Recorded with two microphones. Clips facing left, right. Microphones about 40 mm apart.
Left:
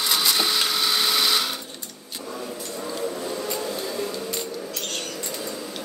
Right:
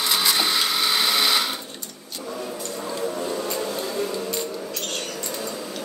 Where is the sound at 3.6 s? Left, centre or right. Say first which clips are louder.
Right 2 dB; right.